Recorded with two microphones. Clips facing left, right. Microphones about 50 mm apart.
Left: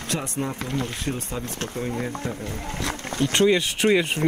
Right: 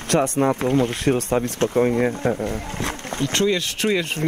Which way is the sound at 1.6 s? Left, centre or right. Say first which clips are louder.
Right 10 dB; right.